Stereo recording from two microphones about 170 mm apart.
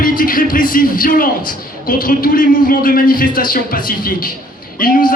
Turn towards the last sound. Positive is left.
turn(degrees=55)  # may be behind; listen again after turning